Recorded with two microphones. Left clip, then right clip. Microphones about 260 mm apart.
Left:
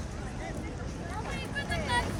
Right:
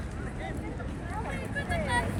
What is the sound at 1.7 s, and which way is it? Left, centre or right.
Vehicle, centre.